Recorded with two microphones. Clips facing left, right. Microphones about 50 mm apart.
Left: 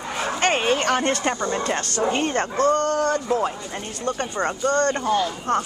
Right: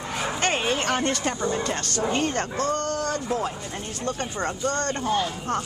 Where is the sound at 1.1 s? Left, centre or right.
Left.